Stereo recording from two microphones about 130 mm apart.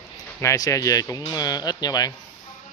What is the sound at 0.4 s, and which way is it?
Speech, 25° left (ahead or behind).